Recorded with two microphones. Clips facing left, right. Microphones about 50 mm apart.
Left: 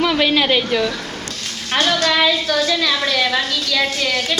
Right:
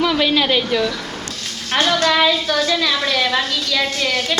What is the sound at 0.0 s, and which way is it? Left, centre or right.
Speech, centre.